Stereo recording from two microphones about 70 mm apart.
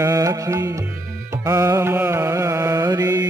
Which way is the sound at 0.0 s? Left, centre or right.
Right.